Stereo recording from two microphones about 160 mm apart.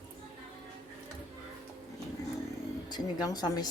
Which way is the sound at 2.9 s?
25° left (ahead or behind).